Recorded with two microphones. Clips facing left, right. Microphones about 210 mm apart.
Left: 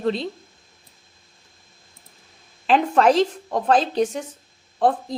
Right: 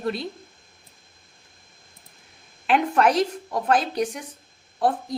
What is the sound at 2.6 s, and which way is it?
Speech, 30° left (ahead or behind).